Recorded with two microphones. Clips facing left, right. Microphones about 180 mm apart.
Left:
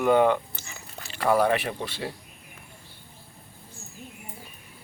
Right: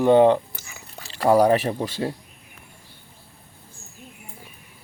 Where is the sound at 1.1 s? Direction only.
35° right (ahead or behind).